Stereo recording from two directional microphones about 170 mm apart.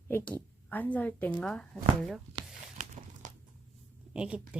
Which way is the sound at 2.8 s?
45° right (ahead or behind).